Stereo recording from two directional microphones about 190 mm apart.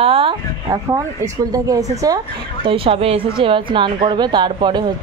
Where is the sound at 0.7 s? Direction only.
15° right (ahead or behind).